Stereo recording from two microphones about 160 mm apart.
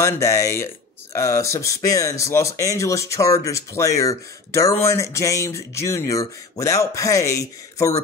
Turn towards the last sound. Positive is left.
turn(degrees=20)  # may be behind; listen again after turning